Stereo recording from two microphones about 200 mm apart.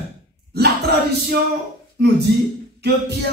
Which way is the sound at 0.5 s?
55° right (ahead or behind).